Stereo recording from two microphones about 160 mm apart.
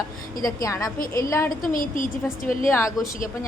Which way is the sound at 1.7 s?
55° left (ahead or behind).